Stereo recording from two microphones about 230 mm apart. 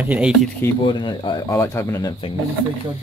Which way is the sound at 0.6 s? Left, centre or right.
Centre.